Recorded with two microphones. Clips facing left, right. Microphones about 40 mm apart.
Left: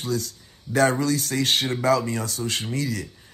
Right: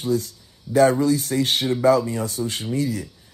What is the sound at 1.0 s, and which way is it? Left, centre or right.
Speech, left.